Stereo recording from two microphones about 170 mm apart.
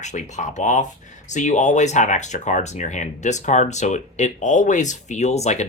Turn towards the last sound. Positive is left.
turn(degrees=40)  # may be behind; listen again after turning